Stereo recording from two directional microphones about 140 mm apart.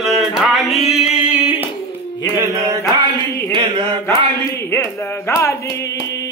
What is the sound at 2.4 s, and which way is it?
Mantra, 25° right (ahead or behind).